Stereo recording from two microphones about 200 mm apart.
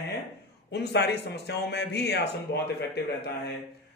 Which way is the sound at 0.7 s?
60° left (ahead or behind).